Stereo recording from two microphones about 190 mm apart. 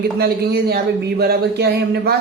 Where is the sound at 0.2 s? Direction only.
55° right (ahead or behind).